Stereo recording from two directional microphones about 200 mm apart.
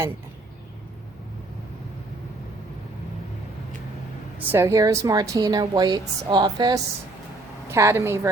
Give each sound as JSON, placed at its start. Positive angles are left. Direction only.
{"t": 4.5, "sound": "a woman's voice", "side_deg": -15}